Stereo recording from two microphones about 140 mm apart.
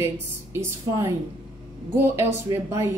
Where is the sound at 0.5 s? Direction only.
20° right (ahead or behind).